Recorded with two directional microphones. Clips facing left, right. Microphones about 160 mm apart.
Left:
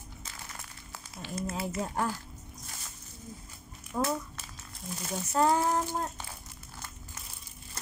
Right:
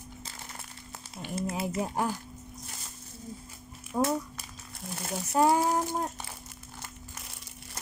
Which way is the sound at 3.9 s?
20° right (ahead or behind).